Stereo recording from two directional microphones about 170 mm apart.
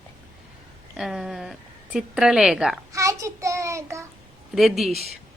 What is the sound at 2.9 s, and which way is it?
Speech, 20° right (ahead or behind).